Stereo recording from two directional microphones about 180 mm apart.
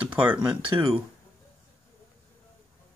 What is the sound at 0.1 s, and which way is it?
Speech, 10° right (ahead or behind).